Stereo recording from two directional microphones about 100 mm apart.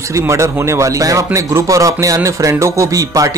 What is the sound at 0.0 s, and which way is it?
Speech, 30° right (ahead or behind).